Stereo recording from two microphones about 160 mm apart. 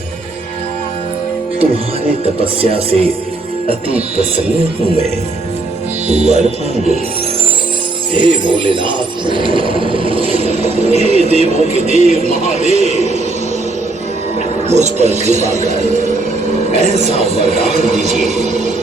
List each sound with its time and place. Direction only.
2.2 s speech: 35° right (ahead or behind)
6.1 s speech: 45° right (ahead or behind)
8.1 s speech: 30° right (ahead or behind)
14.7 s speech: 45° right (ahead or behind)